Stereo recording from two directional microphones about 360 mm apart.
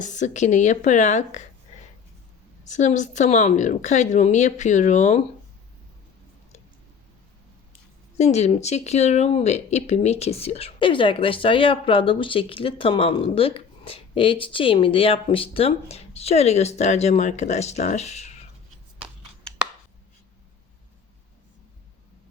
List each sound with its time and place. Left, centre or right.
0.0 s a woman's voice: centre
2.6 s a woman's voice: centre
8.2 s speech: centre